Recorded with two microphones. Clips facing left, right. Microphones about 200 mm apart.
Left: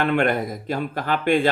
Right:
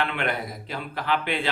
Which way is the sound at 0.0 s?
45° left (ahead or behind).